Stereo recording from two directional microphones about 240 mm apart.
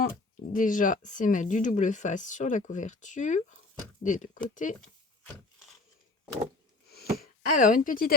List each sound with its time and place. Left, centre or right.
0.5 s speech: left
6.8 s speech: left